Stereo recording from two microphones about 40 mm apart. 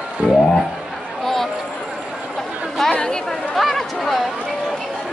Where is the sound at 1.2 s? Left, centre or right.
Centre.